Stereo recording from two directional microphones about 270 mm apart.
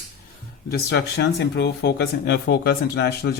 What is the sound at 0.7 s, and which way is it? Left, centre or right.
Speech, left.